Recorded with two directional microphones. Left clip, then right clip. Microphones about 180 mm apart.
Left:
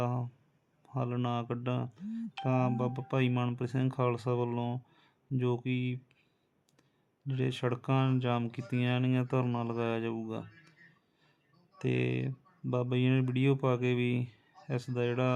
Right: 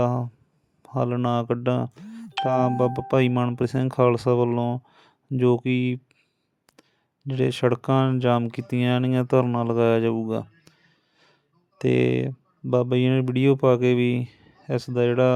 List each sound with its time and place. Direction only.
0.0 s a sound: 35° right (ahead or behind)
0.8 s speech: 40° right (ahead or behind)
4.9 s a sound: 40° right (ahead or behind)
5.4 s speech: 40° right (ahead or behind)
7.3 s speech: 40° right (ahead or behind)
11.8 s speech: 40° right (ahead or behind)